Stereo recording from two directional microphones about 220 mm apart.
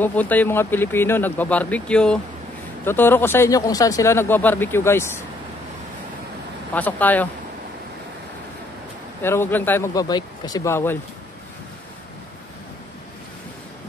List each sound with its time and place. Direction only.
0.0 s speech: 5° left (ahead or behind)
6.7 s speech: 5° left (ahead or behind)
9.2 s speech: 10° left (ahead or behind)